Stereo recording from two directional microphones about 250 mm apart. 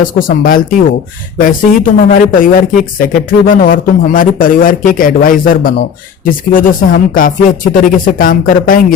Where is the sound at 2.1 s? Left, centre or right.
Left.